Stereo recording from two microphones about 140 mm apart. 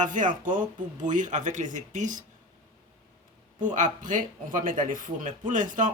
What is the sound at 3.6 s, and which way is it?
Speech, 65° right (ahead or behind).